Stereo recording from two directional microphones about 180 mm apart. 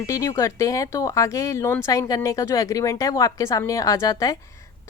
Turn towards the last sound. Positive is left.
turn(degrees=20)  # may be behind; listen again after turning